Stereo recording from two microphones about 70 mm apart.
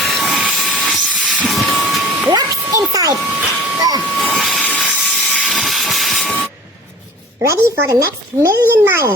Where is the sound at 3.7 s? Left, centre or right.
Right.